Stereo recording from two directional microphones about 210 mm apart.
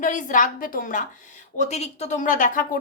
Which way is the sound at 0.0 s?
40° left (ahead or behind).